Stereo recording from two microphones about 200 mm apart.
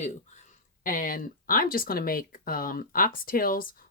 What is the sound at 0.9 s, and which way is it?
Speech, 45° left (ahead or behind).